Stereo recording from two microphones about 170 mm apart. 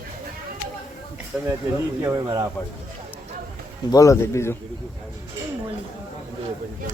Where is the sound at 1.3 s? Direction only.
5° right (ahead or behind).